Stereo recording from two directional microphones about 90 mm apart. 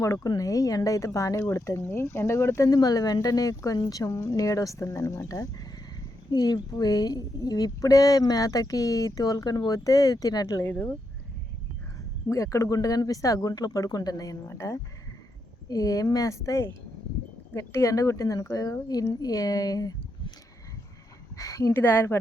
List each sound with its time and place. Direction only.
0.0 s a woman's voice: 35° left (ahead or behind)
2.6 s a woman's voice: 45° left (ahead or behind)
6.3 s a woman's voice: 50° left (ahead or behind)
12.3 s a woman's voice: 35° left (ahead or behind)
21.3 s a sound: 40° left (ahead or behind)
21.8 s speech: 20° left (ahead or behind)